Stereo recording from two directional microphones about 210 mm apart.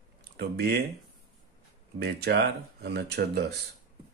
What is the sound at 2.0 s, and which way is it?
Speech, 50° right (ahead or behind).